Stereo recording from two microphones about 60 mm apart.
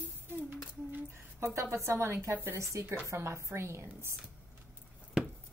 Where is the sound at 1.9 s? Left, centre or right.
Right.